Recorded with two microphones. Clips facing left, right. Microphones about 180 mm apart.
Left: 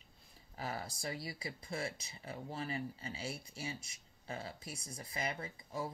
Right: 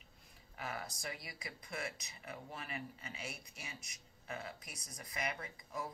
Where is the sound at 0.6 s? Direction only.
30° left (ahead or behind).